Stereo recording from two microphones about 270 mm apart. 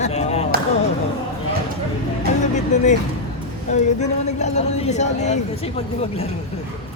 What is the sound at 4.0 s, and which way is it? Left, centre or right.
A man's voice, left.